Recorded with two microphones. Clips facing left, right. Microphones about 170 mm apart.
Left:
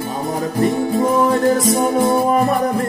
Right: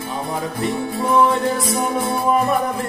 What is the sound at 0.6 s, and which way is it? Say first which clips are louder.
Music: left 7 dB; 45° left (ahead or behind).